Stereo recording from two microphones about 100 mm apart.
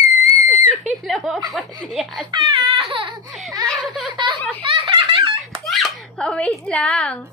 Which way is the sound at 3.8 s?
10° right (ahead or behind).